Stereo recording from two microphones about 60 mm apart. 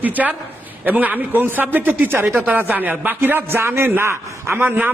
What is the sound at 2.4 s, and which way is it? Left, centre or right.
A man's voice, right.